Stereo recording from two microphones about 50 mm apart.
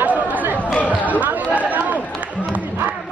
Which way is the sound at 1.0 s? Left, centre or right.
Right.